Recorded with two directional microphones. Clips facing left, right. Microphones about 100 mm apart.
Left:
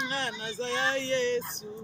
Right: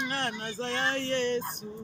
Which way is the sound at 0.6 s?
55° right (ahead or behind).